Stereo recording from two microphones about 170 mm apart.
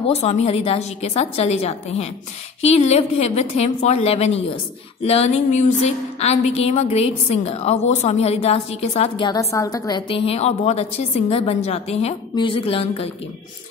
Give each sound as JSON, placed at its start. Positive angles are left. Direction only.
{"t": 0.1, "sound": "a woman's voice", "side_deg": 40}